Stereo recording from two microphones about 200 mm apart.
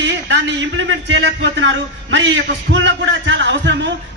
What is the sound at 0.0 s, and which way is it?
A man's voice, 65° right (ahead or behind).